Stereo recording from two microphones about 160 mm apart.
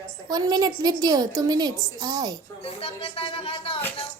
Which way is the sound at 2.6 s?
35° left (ahead or behind).